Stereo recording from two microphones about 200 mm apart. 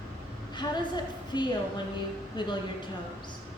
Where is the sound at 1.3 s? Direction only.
20° left (ahead or behind).